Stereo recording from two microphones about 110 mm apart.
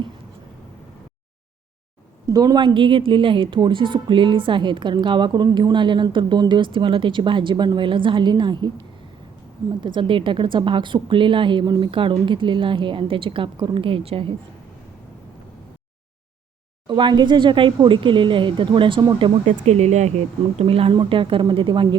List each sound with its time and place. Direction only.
2.2 s a woman's voice: 35° right (ahead or behind)
9.8 s a woman's voice: 45° right (ahead or behind)
16.8 s a woman's voice: 45° right (ahead or behind)
19.6 s speech: 85° right; by 21.8 s 50° right (ahead or behind)